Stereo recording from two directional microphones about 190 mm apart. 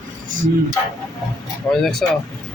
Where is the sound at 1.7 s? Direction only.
5° left (ahead or behind).